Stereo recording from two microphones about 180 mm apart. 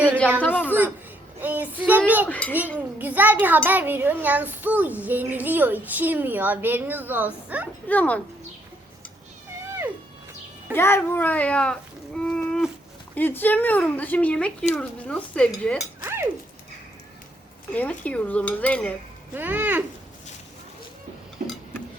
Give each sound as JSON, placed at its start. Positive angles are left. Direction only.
{"t": 0.4, "sound": "a woman's voice", "side_deg": 10}
{"t": 1.4, "sound": "speech", "side_deg": -10}
{"t": 2.3, "sound": "speech", "side_deg": 10}
{"t": 2.7, "sound": "a child's voice", "side_deg": -10}
{"t": 7.9, "sound": "speech", "side_deg": 10}
{"t": 10.8, "sound": "speech", "side_deg": 15}
{"t": 12.2, "sound": "livestock", "side_deg": 5}
{"t": 13.1, "sound": "speech", "side_deg": 10}
{"t": 14.8, "sound": "dishes", "side_deg": 5}
{"t": 17.7, "sound": "speech", "side_deg": 10}
{"t": 19.3, "sound": "a child's voice", "side_deg": -10}
{"t": 21.4, "sound": "tick-tock", "side_deg": -50}